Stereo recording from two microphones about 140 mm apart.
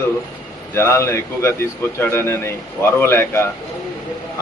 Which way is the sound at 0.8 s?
20° left (ahead or behind).